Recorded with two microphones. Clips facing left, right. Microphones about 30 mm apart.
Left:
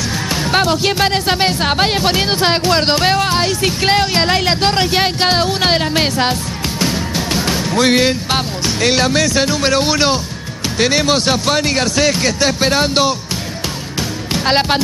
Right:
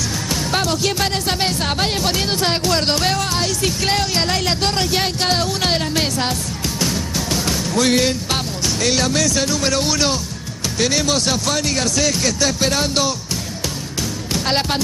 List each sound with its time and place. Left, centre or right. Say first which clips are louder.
0.3 s speech: left 6 dB; left
14.3 s speech: left 5 dB; left